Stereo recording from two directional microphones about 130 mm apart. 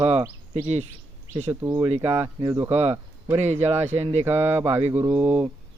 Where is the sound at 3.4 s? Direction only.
60° right (ahead or behind).